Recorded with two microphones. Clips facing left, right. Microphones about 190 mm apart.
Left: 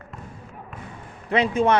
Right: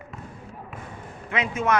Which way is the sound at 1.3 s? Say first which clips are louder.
Left 5 dB; 35° left (ahead or behind).